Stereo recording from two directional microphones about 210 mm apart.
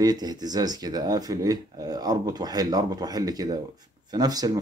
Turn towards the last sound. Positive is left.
turn(degrees=-15)  # may be behind; listen again after turning